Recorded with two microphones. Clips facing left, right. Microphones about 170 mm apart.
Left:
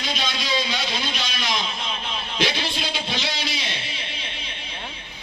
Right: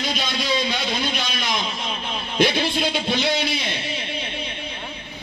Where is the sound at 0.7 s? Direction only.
55° right (ahead or behind).